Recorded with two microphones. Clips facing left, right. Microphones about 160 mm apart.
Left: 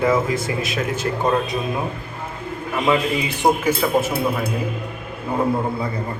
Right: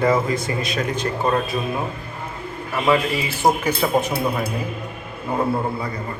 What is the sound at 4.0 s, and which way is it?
Speech, centre (ahead or behind).